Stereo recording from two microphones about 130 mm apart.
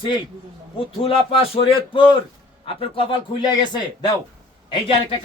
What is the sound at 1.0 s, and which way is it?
A man's voice, 45° left (ahead or behind).